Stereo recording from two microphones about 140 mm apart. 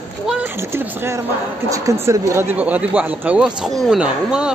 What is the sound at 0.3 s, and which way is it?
Speech, 15° right (ahead or behind).